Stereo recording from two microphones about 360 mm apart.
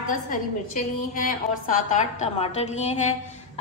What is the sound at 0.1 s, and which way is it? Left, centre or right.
A woman's voice, left.